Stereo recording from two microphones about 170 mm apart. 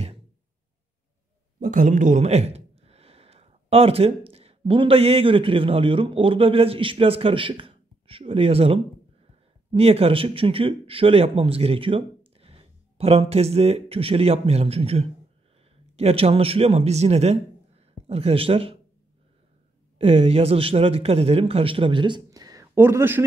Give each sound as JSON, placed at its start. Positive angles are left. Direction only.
{"t": 1.6, "sound": "a man's voice", "side_deg": -50}
{"t": 20.0, "sound": "speech", "side_deg": -35}